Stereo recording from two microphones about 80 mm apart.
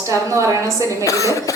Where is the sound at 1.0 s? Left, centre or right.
Left.